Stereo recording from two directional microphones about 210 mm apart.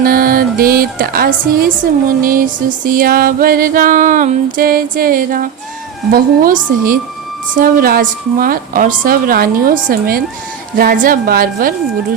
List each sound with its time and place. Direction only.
0.0 s a woman's voice: 45° right (ahead or behind)
2.2 s music: 40° right (ahead or behind)
4.5 s a woman's voice: 45° right (ahead or behind)
6.1 s music: 40° right (ahead or behind)
7.5 s a woman's voice: 45° right (ahead or behind)